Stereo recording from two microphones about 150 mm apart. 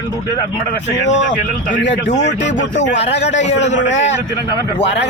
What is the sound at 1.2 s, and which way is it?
Speech, 55° left (ahead or behind).